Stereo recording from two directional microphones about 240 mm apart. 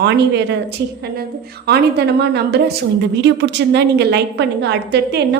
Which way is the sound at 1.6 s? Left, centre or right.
Right.